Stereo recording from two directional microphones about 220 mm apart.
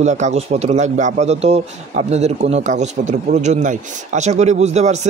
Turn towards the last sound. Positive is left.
turn(degrees=-30)  # may be behind; listen again after turning